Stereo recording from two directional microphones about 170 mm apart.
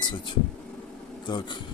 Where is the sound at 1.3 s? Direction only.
25° left (ahead or behind).